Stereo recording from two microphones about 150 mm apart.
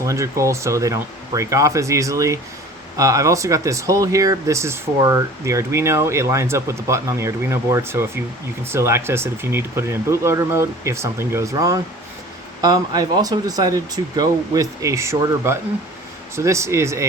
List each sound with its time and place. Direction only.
0.0 s speech: 20° right (ahead or behind)